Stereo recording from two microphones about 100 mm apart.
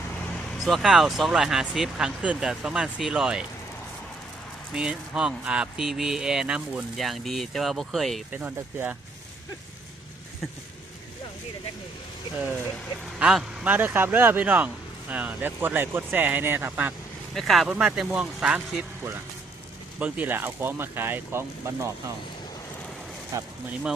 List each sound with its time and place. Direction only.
0.6 s speech: centre (ahead or behind)
4.7 s speech: 5° right (ahead or behind)
8.3 s speech: 15° right (ahead or behind)
13.1 s speech: 5° right (ahead or behind)
13.7 s speech: 20° right (ahead or behind)
17.3 s speech: centre (ahead or behind)
17.7 s speech: 10° right (ahead or behind)
20.0 s speech: 15° right (ahead or behind)
23.3 s speech: 30° right (ahead or behind)